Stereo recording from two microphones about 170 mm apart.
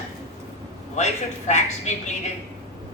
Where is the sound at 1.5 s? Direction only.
45° left (ahead or behind).